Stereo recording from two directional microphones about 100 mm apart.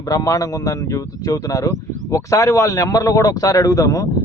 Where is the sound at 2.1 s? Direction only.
35° left (ahead or behind).